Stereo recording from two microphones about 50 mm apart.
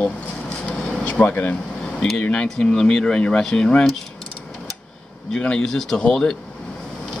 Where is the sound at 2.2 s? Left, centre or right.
Left.